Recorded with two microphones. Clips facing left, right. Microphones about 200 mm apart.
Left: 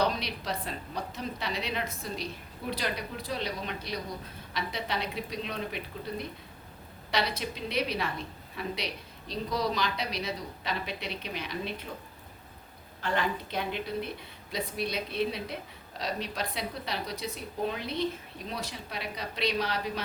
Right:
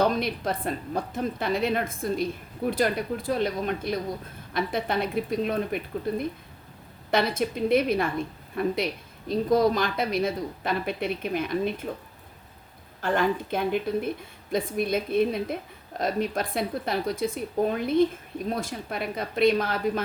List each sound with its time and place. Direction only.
0.0 s speech: 50° right (ahead or behind)
13.0 s speech: 50° right (ahead or behind)